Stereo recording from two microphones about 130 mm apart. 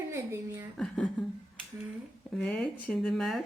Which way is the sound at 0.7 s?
5° left (ahead or behind).